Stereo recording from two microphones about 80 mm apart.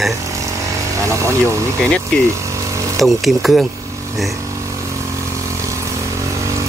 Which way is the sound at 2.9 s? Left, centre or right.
Centre.